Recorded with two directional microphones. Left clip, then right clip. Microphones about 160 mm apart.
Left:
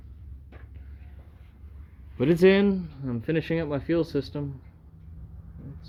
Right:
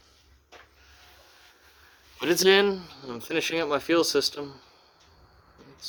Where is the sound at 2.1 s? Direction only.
15° right (ahead or behind).